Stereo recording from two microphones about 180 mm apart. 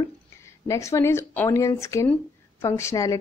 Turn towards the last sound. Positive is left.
turn(degrees=15)  # may be behind; listen again after turning